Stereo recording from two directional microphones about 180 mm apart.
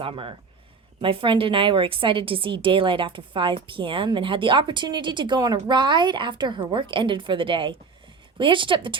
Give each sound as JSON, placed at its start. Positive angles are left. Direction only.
{"t": 0.0, "sound": "a woman's voice", "side_deg": -30}